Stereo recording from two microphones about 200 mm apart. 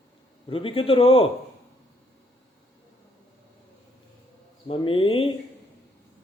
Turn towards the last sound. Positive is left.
turn(degrees=25)  # may be behind; listen again after turning